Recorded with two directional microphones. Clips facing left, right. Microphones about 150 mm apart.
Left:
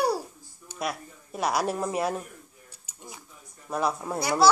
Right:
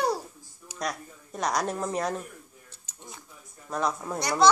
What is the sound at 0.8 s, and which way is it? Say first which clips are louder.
Speech: left 1 dB; 5° left (ahead or behind).